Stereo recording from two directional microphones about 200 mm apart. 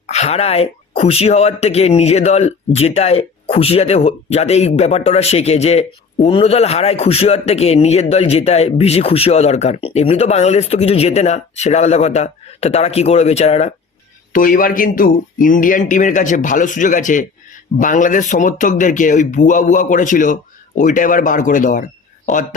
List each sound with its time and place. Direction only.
0.1 s a man's voice: 30° left (ahead or behind)
14.3 s a man's voice: 45° left (ahead or behind)